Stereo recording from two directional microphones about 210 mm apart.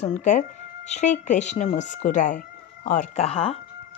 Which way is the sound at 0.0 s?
35° left (ahead or behind).